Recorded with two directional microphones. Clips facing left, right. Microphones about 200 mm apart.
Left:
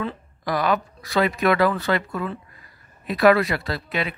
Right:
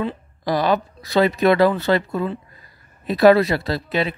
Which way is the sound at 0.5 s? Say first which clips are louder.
Right 3 dB; 30° right (ahead or behind).